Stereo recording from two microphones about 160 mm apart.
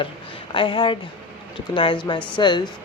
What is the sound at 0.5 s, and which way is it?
A woman's voice, 30° left (ahead or behind).